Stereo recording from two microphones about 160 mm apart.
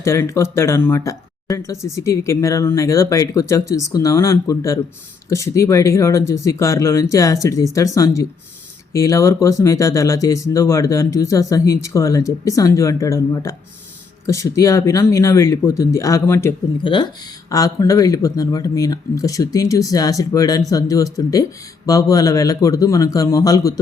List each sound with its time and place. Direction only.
0.0 s speech: 15° left (ahead or behind)
16.8 s speech: 30° left (ahead or behind)